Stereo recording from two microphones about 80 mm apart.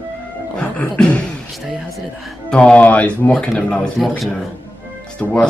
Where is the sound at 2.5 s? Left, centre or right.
Centre.